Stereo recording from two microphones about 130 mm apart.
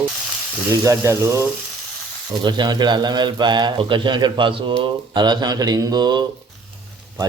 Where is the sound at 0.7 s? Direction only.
20° right (ahead or behind).